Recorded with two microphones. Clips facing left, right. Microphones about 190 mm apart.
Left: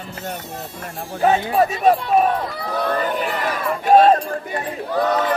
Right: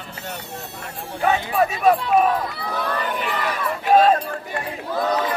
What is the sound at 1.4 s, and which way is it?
Speech, 40° left (ahead or behind).